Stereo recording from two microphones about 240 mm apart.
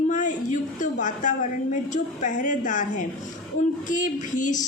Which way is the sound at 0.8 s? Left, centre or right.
Left.